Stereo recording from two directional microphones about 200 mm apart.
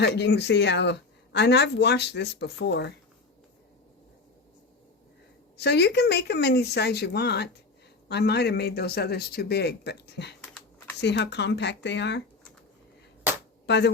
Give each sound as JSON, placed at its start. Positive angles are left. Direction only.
{"t": 0.0, "sound": "speech", "side_deg": 60}
{"t": 5.5, "sound": "speech", "side_deg": 55}
{"t": 13.7, "sound": "speech", "side_deg": 60}